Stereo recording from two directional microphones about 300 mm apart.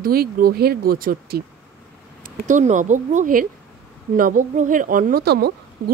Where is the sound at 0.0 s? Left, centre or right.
Right.